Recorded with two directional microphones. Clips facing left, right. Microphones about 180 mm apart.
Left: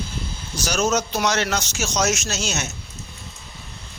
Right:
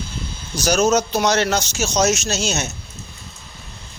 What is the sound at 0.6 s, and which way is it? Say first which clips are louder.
Speech: right 5 dB; 40° right (ahead or behind).